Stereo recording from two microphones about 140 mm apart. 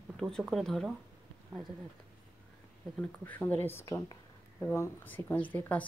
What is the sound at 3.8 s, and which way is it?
Speech, 30° left (ahead or behind).